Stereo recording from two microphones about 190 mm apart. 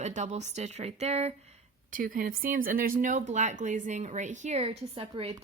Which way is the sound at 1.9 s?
45° right (ahead or behind).